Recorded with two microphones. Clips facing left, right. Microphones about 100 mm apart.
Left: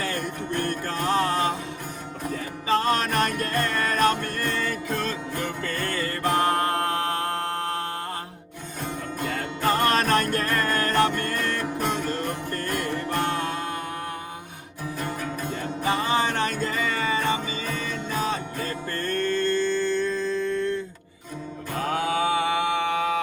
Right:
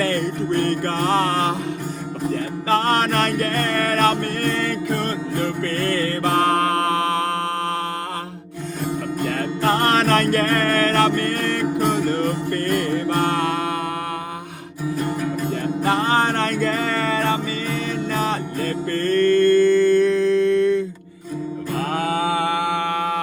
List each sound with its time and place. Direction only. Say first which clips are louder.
0.0 s music: right 8 dB; 60° right (ahead or behind)
9.2 s music: right 4 dB; 55° right (ahead or behind)
14.9 s music: right 7 dB; 15° right (ahead or behind)
15.4 s music: right 5 dB; 55° right (ahead or behind); by 20.8 s 70° right (ahead or behind)
21.8 s mantra: right 2 dB; 45° right (ahead or behind)